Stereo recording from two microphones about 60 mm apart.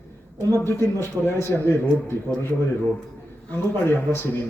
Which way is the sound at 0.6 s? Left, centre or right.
Left.